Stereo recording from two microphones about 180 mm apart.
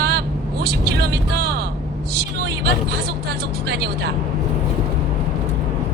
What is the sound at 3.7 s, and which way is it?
Speech, 65° right (ahead or behind).